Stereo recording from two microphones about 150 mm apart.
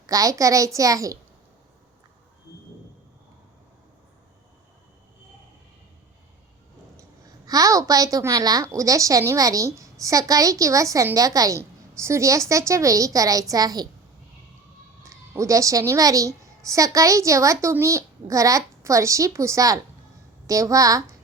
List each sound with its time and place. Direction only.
0.1 s a woman's voice: 20° right (ahead or behind)
6.9 s a woman's voice: 25° right (ahead or behind)
15.0 s a woman's voice: 20° right (ahead or behind)